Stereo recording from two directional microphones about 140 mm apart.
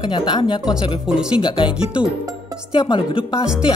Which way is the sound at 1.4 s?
35° left (ahead or behind).